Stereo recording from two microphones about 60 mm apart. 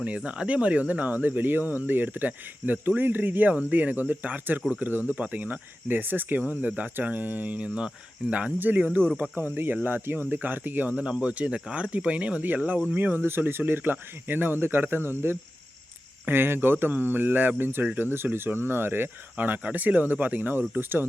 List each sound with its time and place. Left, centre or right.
0.0 s speech: right
11.0 s speech: centre